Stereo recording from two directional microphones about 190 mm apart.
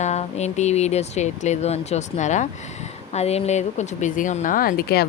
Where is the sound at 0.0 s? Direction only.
35° left (ahead or behind).